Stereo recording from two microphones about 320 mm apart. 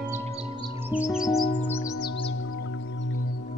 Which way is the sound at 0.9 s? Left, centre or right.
Centre.